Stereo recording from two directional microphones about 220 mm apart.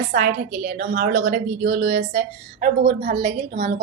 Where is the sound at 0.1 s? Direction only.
45° right (ahead or behind).